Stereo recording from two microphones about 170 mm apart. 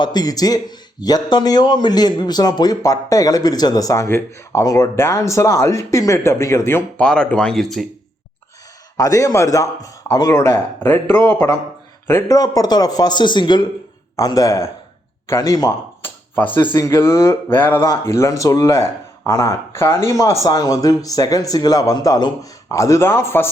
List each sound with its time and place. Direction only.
0.0 s a man's voice: 25° left (ahead or behind); by 7.9 s centre (ahead or behind)
9.0 s a man's voice: 20° left (ahead or behind)
16.0 s a sound: 10° left (ahead or behind)
16.7 s speech: 15° left (ahead or behind)